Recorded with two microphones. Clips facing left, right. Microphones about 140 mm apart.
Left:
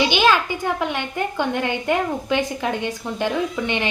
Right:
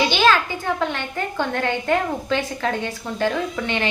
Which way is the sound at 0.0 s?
15° left (ahead or behind).